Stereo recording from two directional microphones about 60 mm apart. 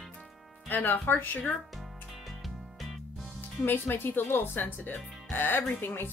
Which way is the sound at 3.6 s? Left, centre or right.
Left.